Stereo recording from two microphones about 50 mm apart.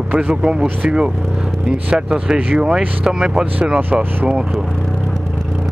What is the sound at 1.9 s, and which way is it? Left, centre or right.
Speech, centre.